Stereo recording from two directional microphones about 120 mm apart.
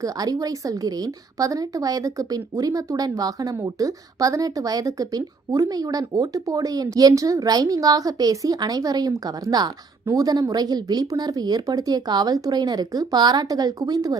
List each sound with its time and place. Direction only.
0.0 s a woman's voice: 30° right (ahead or behind)